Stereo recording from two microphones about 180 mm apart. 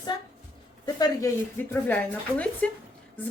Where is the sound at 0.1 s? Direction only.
25° left (ahead or behind).